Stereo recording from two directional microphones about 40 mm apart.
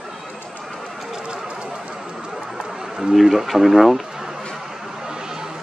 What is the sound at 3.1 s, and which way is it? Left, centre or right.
Speech, centre.